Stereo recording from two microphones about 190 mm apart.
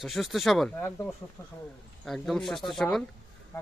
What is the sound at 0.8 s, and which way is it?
Speech, 10° left (ahead or behind).